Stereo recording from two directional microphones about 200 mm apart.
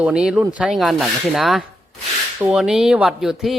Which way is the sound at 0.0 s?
5° right (ahead or behind).